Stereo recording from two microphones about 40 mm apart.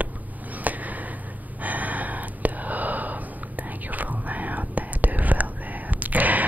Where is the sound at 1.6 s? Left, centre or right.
Right.